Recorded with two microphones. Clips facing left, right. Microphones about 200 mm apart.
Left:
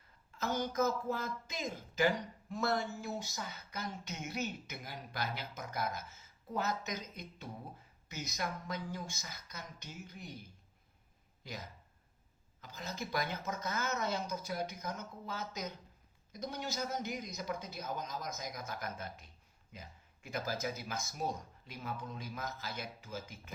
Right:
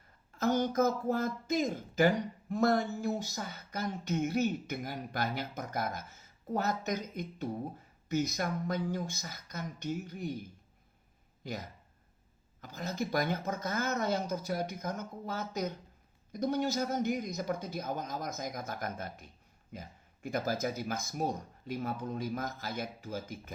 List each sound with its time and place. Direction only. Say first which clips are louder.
0.3 s speech: right 6 dB; 55° right (ahead or behind)
12.6 s speech: right 7 dB; 50° right (ahead or behind)